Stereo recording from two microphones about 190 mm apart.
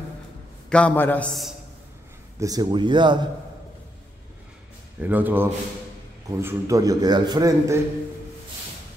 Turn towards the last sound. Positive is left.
turn(degrees=-15)  # may be behind; listen again after turning